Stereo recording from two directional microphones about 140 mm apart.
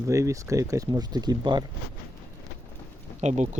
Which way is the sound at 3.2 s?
55° right (ahead or behind).